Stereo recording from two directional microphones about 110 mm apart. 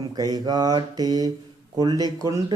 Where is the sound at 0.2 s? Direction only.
35° right (ahead or behind).